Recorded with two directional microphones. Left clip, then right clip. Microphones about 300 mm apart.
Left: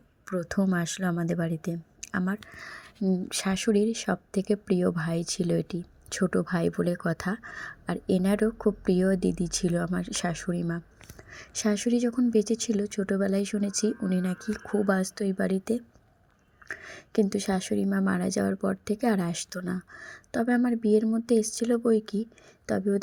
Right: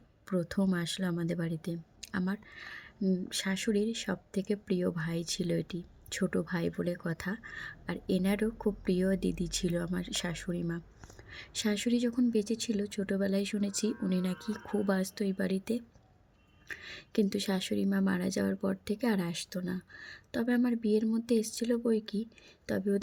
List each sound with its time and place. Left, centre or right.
0.3 s a woman's voice: centre